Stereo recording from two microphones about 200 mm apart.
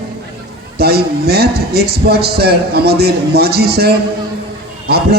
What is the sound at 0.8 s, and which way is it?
A man's voice, 50° right (ahead or behind).